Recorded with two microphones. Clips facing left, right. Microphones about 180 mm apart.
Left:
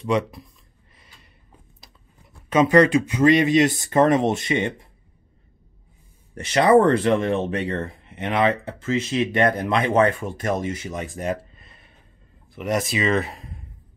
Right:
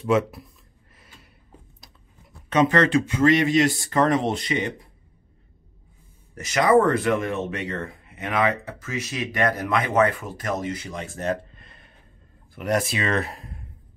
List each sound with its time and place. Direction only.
0.0 s speech: 5° right (ahead or behind)
0.9 s a sound: centre (ahead or behind)
2.5 s speech: 10° left (ahead or behind)
6.3 s speech: 30° left (ahead or behind); by 13.7 s centre (ahead or behind)